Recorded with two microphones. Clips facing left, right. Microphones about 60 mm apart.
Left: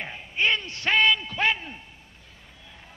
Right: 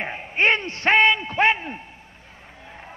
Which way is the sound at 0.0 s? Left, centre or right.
Right.